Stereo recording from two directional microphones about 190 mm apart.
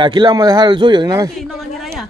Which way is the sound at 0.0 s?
25° right (ahead or behind).